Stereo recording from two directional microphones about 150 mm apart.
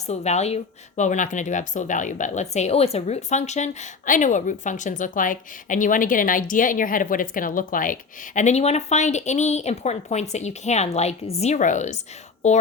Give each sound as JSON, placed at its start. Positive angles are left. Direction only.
{"t": 0.1, "sound": "speech", "side_deg": 45}
{"t": 8.4, "sound": "speech", "side_deg": 50}